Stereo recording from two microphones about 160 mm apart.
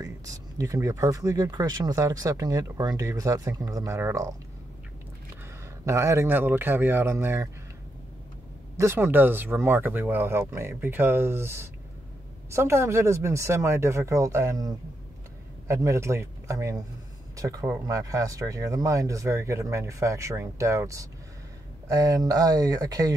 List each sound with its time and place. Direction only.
0.0 s speech: 20° right (ahead or behind)
5.9 s speech: 15° right (ahead or behind)
8.7 s speech: 15° right (ahead or behind)
15.7 s speech: 20° right (ahead or behind)